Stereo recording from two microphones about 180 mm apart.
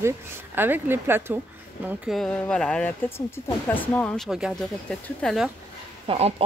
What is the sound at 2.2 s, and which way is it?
Speech, 5° left (ahead or behind).